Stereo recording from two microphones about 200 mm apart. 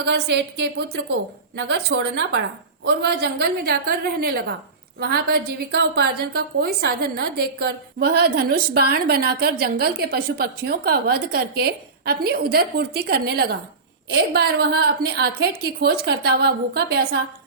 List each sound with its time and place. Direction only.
0.0 s a woman's voice: 60° right (ahead or behind)